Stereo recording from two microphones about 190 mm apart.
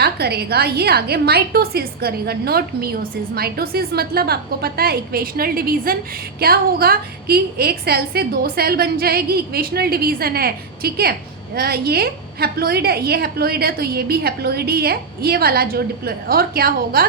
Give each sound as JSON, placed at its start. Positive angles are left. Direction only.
{"t": 0.0, "sound": "a woman's voice", "side_deg": -60}